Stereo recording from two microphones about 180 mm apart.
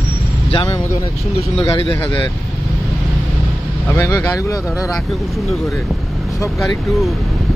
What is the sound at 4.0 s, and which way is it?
Speech, 15° left (ahead or behind).